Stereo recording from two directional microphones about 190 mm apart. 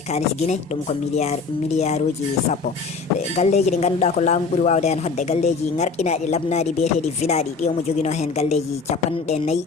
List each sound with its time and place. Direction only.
0.1 s speech: 35° left (ahead or behind)
3.3 s speech: 35° left (ahead or behind)